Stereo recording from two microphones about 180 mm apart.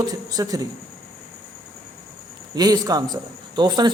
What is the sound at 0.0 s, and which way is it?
Speech, 20° right (ahead or behind).